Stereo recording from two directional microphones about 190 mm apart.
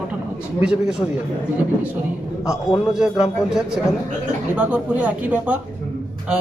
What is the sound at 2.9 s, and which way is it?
Speech, 5° right (ahead or behind).